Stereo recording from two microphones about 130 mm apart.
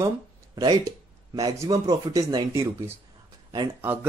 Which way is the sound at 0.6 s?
30° right (ahead or behind).